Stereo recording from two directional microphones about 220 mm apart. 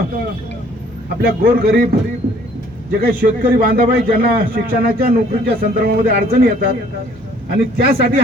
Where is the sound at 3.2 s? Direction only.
45° right (ahead or behind).